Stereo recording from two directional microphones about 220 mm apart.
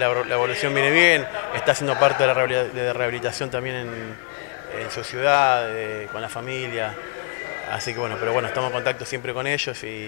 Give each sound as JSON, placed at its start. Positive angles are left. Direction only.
{"t": 0.0, "sound": "a man's voice", "side_deg": 20}
{"t": 5.2, "sound": "a man's voice", "side_deg": 20}
{"t": 8.0, "sound": "a man's voice", "side_deg": 25}